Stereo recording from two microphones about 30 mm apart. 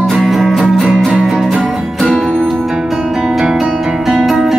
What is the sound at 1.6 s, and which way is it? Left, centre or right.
Music, left.